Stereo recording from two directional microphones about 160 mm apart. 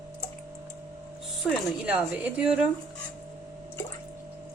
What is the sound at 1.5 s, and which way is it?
A woman's voice, 5° right (ahead or behind).